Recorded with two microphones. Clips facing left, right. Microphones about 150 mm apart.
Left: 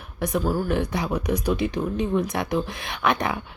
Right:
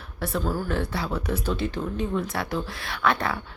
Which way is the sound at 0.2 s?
15° left (ahead or behind).